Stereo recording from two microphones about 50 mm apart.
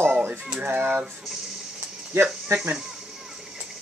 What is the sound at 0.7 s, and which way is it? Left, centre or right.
Speech, right.